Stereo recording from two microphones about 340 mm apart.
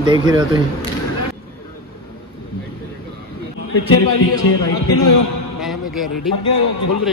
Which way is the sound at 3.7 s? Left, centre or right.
Left.